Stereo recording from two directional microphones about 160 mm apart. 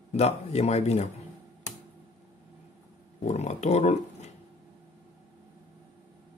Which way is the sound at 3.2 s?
45° left (ahead or behind).